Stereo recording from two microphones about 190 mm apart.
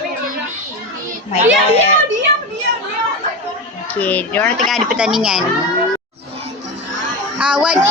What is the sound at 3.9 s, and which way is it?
Speech, 10° left (ahead or behind).